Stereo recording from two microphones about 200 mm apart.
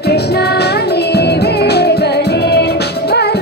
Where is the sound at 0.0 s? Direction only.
55° left (ahead or behind).